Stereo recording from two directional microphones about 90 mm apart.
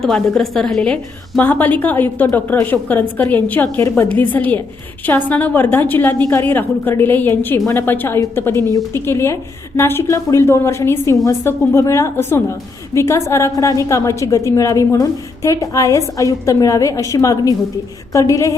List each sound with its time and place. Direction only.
0.0 s a woman's voice: 5° left (ahead or behind)
1.4 s a woman's voice: 20° left (ahead or behind); by 18.5 s 35° left (ahead or behind)